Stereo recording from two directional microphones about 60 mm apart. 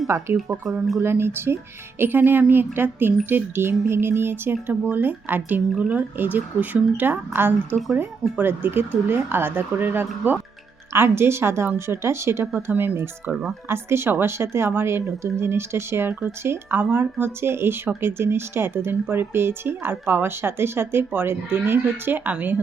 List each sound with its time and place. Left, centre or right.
0.1 s speech: right
5.7 s speech: centre
6.0 s speech: right